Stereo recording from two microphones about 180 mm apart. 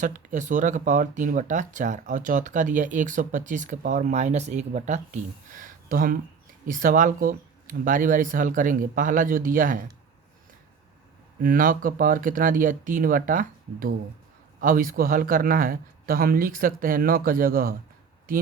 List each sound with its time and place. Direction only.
0.0 s speech: 45° right (ahead or behind)
11.4 s speech: 50° right (ahead or behind)